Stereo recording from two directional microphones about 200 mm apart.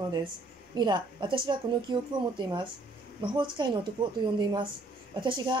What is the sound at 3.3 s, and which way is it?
A woman's voice, 25° right (ahead or behind).